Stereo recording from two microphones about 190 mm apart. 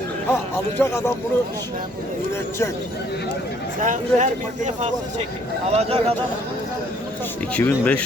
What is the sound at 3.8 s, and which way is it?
Speech, 40° right (ahead or behind).